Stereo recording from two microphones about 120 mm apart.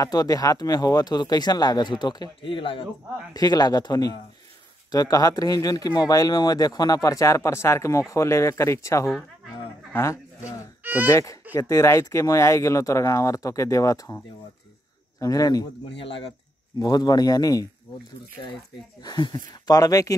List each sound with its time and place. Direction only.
0.0 s speech: 30° left (ahead or behind)
3.3 s speech: 35° left (ahead or behind)
10.8 s a sound: 15° right (ahead or behind)
11.1 s speech: 25° left (ahead or behind)
16.8 s speech: 35° left (ahead or behind)
19.0 s speech: 35° left (ahead or behind)